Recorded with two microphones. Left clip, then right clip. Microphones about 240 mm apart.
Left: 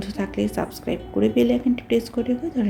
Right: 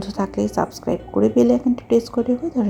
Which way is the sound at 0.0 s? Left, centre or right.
Centre.